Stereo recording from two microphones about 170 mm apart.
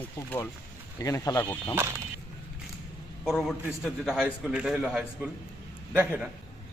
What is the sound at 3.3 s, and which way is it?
A man's voice, centre (ahead or behind).